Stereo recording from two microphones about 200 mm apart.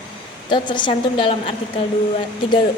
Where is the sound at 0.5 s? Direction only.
25° left (ahead or behind).